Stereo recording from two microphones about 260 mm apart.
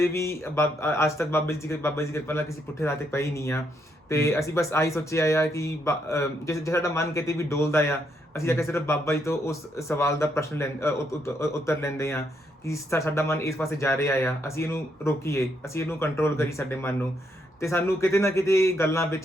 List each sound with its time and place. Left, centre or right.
0.0 s speech: centre